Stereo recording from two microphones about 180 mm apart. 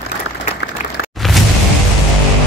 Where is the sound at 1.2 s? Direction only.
Centre (ahead or behind).